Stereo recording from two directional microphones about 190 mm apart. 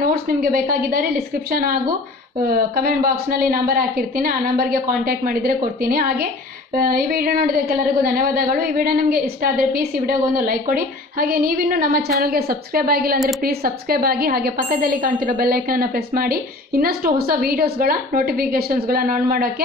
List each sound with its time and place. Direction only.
0.0 s a woman's voice: 50° right (ahead or behind)